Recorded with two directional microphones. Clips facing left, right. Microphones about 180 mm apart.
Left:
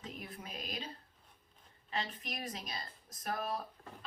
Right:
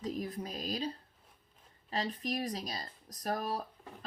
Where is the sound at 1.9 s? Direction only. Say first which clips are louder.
Right 6 dB; 35° right (ahead or behind).